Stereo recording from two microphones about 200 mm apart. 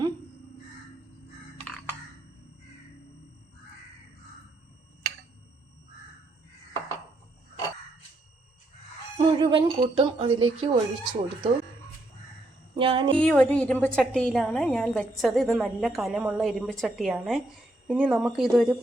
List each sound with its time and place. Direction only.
9.1 s speech: 25° right (ahead or behind)
12.7 s speech: 25° right (ahead or behind)
13.1 s a woman's voice: 5° left (ahead or behind)